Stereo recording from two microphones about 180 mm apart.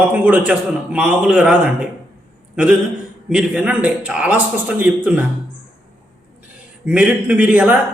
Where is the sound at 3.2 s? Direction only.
5° right (ahead or behind).